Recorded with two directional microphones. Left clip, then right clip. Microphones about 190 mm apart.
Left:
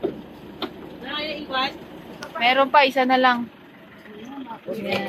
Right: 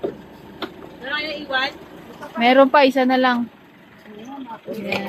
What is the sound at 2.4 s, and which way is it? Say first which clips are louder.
Speech: right 3 dB; 35° right (ahead or behind).